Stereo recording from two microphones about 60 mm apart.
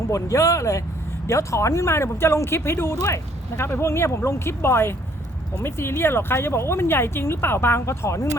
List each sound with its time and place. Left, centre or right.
0.1 s speech: left
3.0 s speech: left